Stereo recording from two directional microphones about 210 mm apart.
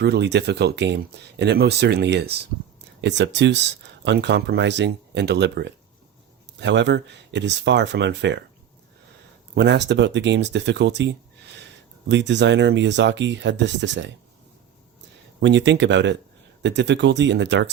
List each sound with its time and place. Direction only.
0.0 s speech: 55° right (ahead or behind)
9.6 s speech: 55° right (ahead or behind)
15.4 s speech: 60° right (ahead or behind)